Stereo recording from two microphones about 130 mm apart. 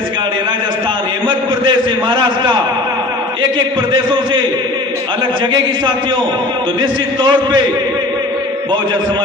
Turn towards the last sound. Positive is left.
turn(degrees=-35)  # may be behind; listen again after turning